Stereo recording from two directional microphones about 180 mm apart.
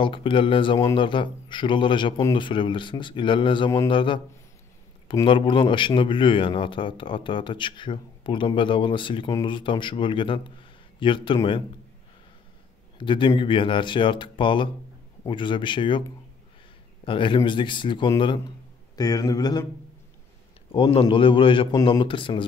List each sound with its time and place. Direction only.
0.0 s speech: 30° left (ahead or behind)
13.0 s speech: 25° left (ahead or behind)
17.0 s speech: 30° left (ahead or behind)
20.7 s speech: 30° left (ahead or behind)